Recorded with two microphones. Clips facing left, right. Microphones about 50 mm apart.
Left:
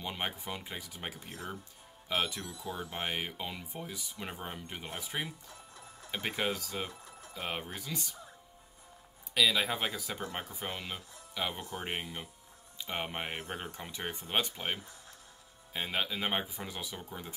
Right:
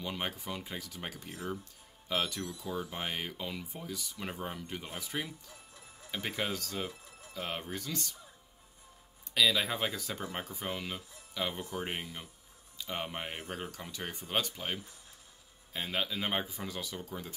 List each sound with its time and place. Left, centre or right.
0.2 s speech: centre
4.8 s speech: centre
7.3 s speech: centre
9.3 s speech: centre
12.7 s speech: left